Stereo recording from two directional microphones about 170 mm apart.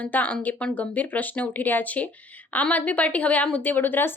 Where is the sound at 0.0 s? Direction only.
10° left (ahead or behind).